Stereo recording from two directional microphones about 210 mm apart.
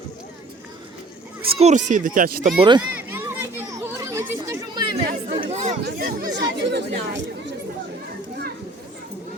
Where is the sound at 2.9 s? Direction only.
10° right (ahead or behind).